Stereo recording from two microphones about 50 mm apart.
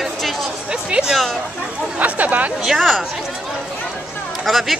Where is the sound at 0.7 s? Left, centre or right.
Centre.